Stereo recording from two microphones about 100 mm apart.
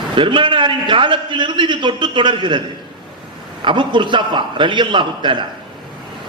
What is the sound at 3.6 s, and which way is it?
A man's voice, 55° right (ahead or behind).